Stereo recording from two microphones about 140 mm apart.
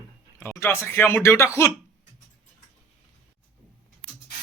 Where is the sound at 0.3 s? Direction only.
15° left (ahead or behind).